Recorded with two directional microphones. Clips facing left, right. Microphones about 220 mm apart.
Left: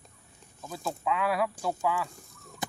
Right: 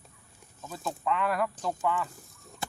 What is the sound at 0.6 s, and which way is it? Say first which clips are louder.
Speech: left 1 dB; 10° left (ahead or behind).